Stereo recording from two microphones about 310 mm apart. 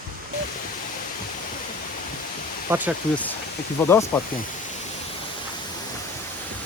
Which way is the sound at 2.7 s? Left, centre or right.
Centre.